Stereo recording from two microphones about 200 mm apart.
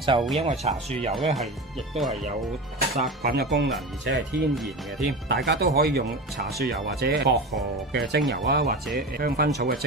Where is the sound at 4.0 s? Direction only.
65° right (ahead or behind).